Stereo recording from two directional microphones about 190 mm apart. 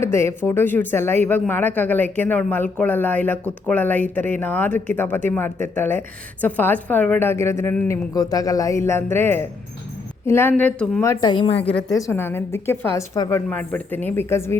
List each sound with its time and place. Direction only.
0.0 s a woman's voice: 15° left (ahead or behind); by 11.8 s 30° left (ahead or behind)
11.9 s speech: 15° left (ahead or behind)